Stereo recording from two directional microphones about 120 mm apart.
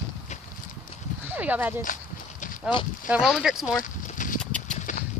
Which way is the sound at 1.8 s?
90° left.